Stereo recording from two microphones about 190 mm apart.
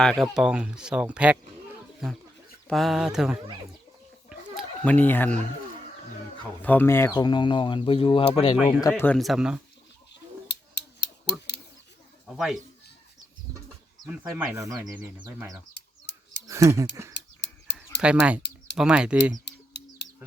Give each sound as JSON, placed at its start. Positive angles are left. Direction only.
{"t": 0.0, "sound": "speech", "side_deg": 0}
{"t": 2.6, "sound": "speech", "side_deg": 0}
{"t": 4.3, "sound": "a sound", "side_deg": -5}
{"t": 4.9, "sound": "speech", "side_deg": 10}
{"t": 6.6, "sound": "speech", "side_deg": 10}
{"t": 9.0, "sound": "speech", "side_deg": 5}
{"t": 10.5, "sound": "a sound", "side_deg": 65}
{"t": 12.2, "sound": "speech", "side_deg": 0}
{"t": 14.1, "sound": "speech", "side_deg": -10}
{"t": 15.7, "sound": "bird", "side_deg": 65}
{"t": 16.5, "sound": "speech", "side_deg": -15}
{"t": 17.2, "sound": "a sound", "side_deg": 65}
{"t": 18.0, "sound": "speech", "side_deg": -5}
{"t": 19.5, "sound": "bird", "side_deg": 65}